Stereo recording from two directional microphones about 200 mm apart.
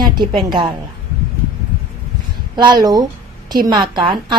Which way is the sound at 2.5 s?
20° right (ahead or behind).